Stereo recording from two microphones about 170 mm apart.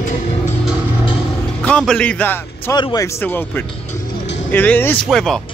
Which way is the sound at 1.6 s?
5° left (ahead or behind).